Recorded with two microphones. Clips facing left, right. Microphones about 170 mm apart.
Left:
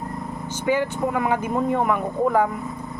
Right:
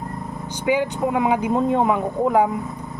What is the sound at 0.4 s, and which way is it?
Speech, 15° right (ahead or behind).